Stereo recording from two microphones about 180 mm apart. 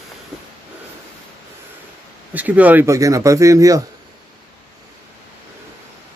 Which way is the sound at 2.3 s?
10° right (ahead or behind).